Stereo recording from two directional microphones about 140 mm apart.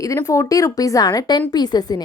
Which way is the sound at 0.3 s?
25° left (ahead or behind).